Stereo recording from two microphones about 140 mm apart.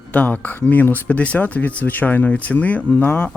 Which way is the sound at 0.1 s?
10° left (ahead or behind).